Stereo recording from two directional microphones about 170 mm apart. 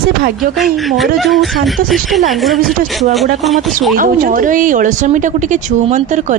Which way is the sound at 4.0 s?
55° right (ahead or behind).